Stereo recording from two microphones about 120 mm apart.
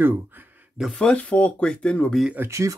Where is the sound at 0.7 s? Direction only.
5° left (ahead or behind).